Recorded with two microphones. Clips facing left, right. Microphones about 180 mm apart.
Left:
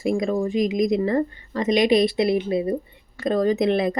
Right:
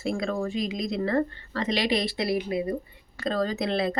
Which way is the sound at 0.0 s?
15° left (ahead or behind).